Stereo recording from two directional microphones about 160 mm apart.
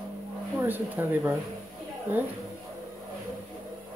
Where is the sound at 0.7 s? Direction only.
10° right (ahead or behind).